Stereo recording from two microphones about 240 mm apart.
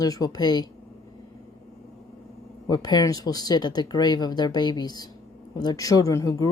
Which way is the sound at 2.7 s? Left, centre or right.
Centre.